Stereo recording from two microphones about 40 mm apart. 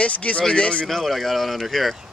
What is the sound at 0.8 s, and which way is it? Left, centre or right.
Speech, centre.